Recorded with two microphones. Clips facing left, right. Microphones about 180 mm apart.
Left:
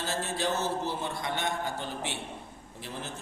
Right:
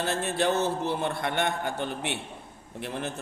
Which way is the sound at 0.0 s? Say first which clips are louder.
Right 5 dB; 60° right (ahead or behind).